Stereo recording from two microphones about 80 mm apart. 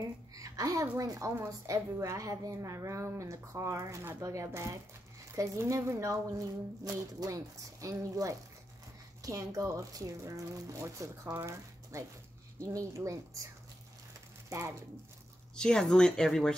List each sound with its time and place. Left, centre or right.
0.3 s a sound: right
0.9 s a woman's voice: right
15.5 s speech: centre